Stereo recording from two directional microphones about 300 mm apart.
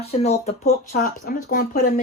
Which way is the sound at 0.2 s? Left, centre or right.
Left.